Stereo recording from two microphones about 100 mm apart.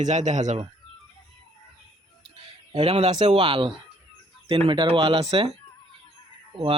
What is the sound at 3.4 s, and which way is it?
Speech, 60° right (ahead or behind).